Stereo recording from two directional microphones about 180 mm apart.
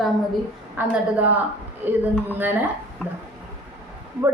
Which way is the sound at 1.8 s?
10° right (ahead or behind).